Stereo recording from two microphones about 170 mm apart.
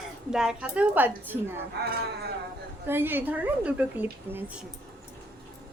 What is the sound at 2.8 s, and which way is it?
A woman's voice, 15° right (ahead or behind).